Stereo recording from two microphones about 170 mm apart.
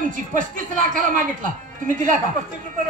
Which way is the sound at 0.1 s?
50° right (ahead or behind).